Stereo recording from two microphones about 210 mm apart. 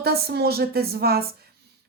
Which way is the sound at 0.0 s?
50° right (ahead or behind).